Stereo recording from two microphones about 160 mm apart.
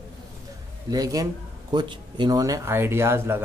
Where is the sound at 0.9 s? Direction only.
20° right (ahead or behind).